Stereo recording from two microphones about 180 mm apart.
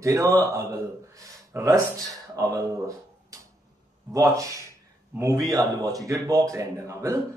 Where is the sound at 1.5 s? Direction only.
15° right (ahead or behind).